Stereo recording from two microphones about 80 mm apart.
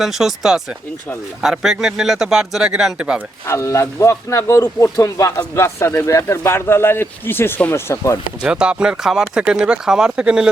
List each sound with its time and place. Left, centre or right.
0.0 s speech: centre
3.4 s speech: left
8.4 s speech: centre